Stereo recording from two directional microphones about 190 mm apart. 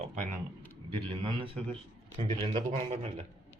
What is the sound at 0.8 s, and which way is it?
A man's voice, 25° right (ahead or behind).